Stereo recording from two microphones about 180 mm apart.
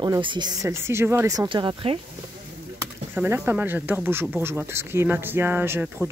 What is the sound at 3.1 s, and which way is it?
Speech, 10° right (ahead or behind).